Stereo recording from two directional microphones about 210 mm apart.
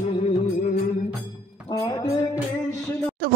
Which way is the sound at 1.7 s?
20° left (ahead or behind).